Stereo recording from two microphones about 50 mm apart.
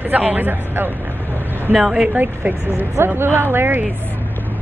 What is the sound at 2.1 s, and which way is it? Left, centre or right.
Speech, right.